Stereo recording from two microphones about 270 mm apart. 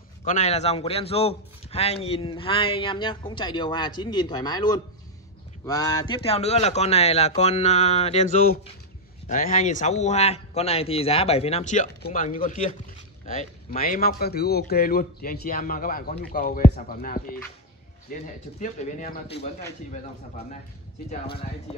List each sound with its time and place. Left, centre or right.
0.2 s a man's voice: left
21.1 s speech: left